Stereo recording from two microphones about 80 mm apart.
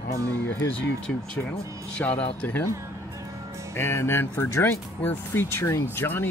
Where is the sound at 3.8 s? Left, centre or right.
Left.